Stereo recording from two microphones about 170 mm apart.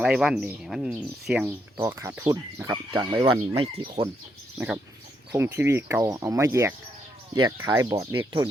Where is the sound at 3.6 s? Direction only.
35° right (ahead or behind).